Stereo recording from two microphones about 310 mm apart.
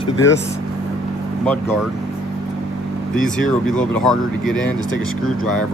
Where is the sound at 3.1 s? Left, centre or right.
Centre.